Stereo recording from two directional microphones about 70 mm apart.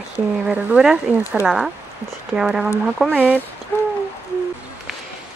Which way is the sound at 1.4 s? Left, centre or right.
Centre.